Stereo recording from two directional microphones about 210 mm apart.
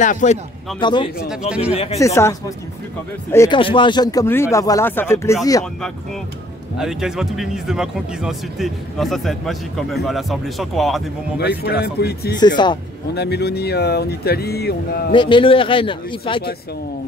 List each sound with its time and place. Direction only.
0.0 s speech: 35° left (ahead or behind)
0.7 s speech: 20° left (ahead or behind)
1.5 s speech: 5° right (ahead or behind)
2.0 s speech: 15° left (ahead or behind)
6.8 s speech: centre (ahead or behind)
11.3 s speech: 50° left (ahead or behind)
12.4 s speech: 20° left (ahead or behind)
13.1 s speech: 50° left (ahead or behind)
15.0 s speech: 25° left (ahead or behind)